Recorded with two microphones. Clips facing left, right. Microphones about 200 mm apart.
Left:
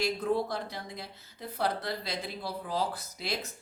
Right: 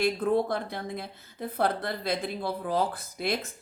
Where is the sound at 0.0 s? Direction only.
55° right (ahead or behind).